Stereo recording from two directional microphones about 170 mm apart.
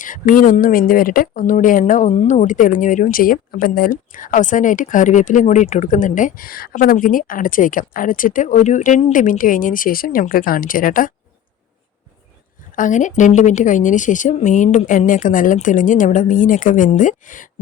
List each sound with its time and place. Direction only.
0.0 s speech: 50° left (ahead or behind)
12.7 s speech: 50° left (ahead or behind)